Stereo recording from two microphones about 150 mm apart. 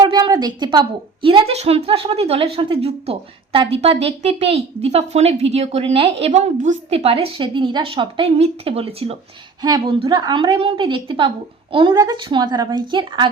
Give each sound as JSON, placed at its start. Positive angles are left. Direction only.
{"t": 0.0, "sound": "a woman's voice", "side_deg": -30}
{"t": 9.6, "sound": "a woman's voice", "side_deg": -25}